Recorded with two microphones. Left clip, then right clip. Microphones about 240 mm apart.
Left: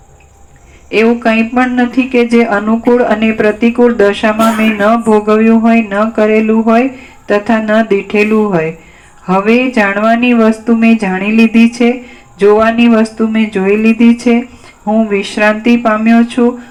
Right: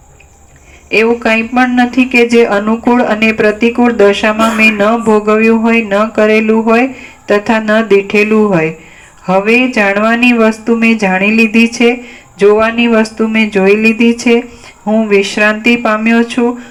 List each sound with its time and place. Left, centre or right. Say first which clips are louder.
0.9 s speech: right 1 dB; right